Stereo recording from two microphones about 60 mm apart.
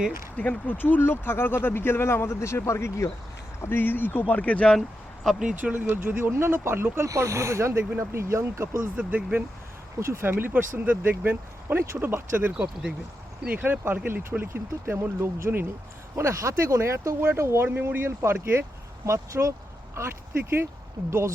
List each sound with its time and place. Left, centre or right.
0.7 s speech: left
3.6 s speech: left
4.8 s speech: centre
5.4 s speech: centre
5.7 s speech: right
7.1 s speech: right
9.0 s speech: right
10.0 s speech: right
11.7 s speech: right
12.5 s speech: centre
13.5 s speech: right
19.0 s speech: right
20.0 s speech: right